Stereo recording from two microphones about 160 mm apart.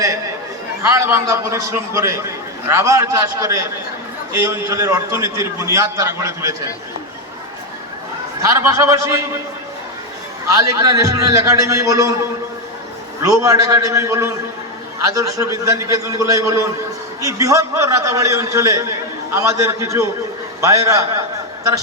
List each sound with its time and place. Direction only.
0.8 s a man's voice: 15° right (ahead or behind)
8.4 s a man's voice: 20° right (ahead or behind)
10.5 s a man's voice: 20° right (ahead or behind)
13.2 s a man's voice: 20° right (ahead or behind)